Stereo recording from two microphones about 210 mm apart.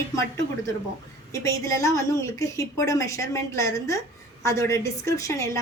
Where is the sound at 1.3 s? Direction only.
15° left (ahead or behind).